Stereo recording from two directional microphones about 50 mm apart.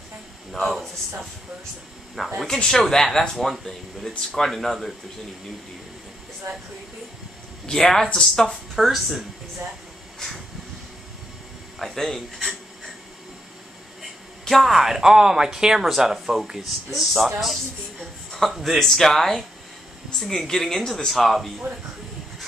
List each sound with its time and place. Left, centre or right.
0.5 s speech: centre
2.1 s speech: centre
2.6 s speech: centre
3.3 s speech: centre
7.6 s speech: centre
8.8 s speech: centre
10.1 s vehicle: centre
11.8 s speech: centre
14.4 s speech: centre
18.5 s speech: centre